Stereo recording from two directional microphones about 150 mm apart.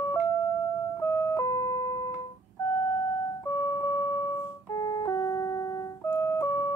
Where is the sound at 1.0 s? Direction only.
15° left (ahead or behind).